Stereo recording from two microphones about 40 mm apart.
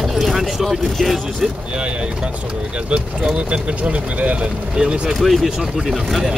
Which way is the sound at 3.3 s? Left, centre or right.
Right.